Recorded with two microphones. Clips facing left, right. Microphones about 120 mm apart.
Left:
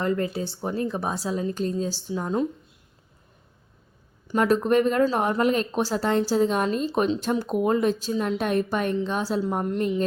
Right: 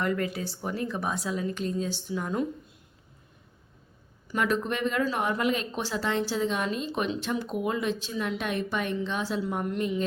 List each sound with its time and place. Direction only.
0.0 s speech: 30° left (ahead or behind)
4.3 s speech: 40° left (ahead or behind)